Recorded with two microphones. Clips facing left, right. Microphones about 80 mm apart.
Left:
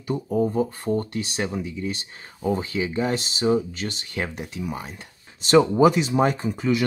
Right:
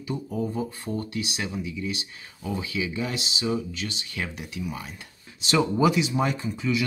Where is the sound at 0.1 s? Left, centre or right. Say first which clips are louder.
Left 6 dB; left.